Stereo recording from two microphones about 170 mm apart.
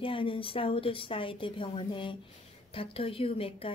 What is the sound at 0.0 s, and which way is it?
A woman's voice, 30° left (ahead or behind).